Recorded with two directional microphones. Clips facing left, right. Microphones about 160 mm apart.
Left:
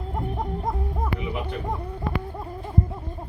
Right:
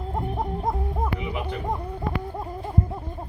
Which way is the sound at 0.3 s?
25° right (ahead or behind).